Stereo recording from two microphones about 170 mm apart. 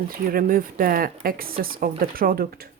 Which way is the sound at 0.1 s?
60° right (ahead or behind).